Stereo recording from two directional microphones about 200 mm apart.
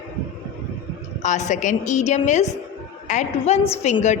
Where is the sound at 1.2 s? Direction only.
35° left (ahead or behind).